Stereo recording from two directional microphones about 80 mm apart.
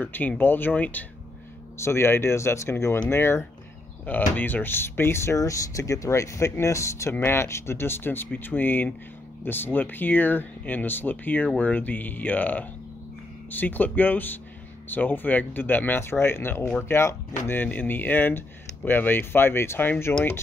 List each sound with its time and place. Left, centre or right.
0.0 s speech: left
1.8 s speech: left
4.0 s speech: left